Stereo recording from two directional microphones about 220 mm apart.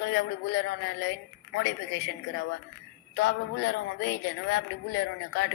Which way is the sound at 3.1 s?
55° left (ahead or behind).